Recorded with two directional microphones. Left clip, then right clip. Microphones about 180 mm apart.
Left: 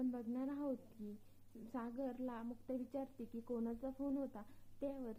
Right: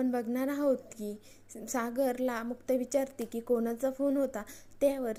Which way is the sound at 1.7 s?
30° right (ahead or behind).